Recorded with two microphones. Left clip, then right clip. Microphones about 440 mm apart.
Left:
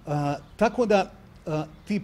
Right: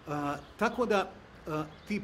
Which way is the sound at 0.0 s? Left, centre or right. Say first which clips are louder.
Left 6 dB; left.